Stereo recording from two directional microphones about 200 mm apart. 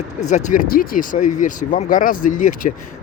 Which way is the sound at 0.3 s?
35° left (ahead or behind).